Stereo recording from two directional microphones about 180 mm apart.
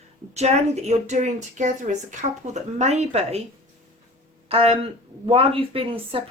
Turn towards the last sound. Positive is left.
turn(degrees=-30)  # may be behind; listen again after turning